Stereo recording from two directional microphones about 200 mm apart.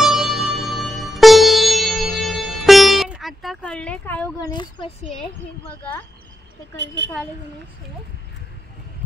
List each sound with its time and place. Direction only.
0.0 s music: centre (ahead or behind)
4.5 s speech: 20° left (ahead or behind)
5.6 s speech: 10° left (ahead or behind)
7.0 s speech: 60° right (ahead or behind)